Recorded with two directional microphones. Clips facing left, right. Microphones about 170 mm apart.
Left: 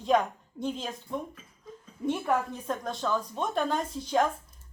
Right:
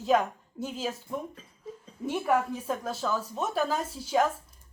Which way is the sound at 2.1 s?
5° right (ahead or behind).